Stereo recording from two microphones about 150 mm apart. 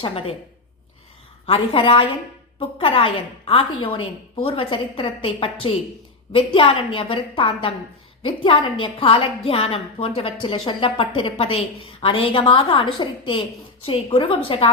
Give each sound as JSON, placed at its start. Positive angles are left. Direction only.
{"t": 1.5, "sound": "a woman's voice", "side_deg": 35}